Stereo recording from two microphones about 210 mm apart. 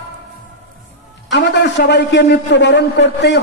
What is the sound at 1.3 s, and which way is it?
A man's voice, 55° left (ahead or behind).